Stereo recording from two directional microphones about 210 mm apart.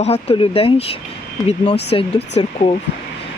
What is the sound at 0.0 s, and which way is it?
Speech, 30° left (ahead or behind).